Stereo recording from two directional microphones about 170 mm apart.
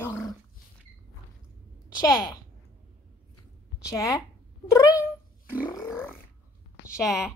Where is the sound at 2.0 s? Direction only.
20° left (ahead or behind).